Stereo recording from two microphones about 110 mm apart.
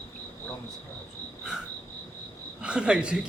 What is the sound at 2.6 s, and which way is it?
Speech, 10° right (ahead or behind).